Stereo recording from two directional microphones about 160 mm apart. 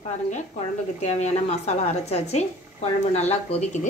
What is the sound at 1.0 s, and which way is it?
A woman's voice, 45° left (ahead or behind).